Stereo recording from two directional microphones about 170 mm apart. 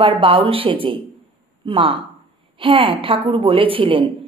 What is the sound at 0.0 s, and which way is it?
A woman's voice, 30° right (ahead or behind).